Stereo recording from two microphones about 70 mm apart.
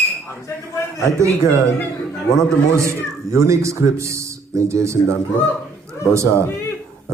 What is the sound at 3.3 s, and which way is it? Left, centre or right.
Speech, right.